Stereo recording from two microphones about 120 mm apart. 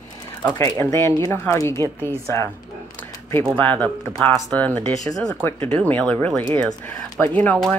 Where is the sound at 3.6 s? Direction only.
15° left (ahead or behind).